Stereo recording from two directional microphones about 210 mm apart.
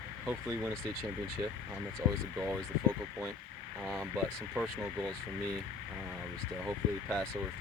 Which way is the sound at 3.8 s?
5° right (ahead or behind).